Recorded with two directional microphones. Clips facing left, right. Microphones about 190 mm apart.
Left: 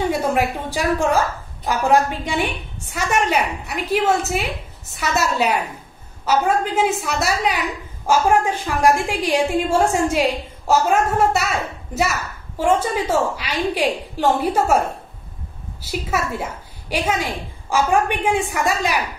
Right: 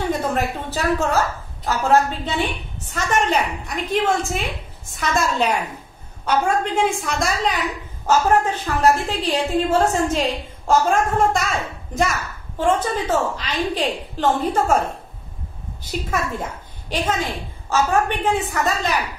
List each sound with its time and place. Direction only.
0.1 s a woman's voice: 10° left (ahead or behind)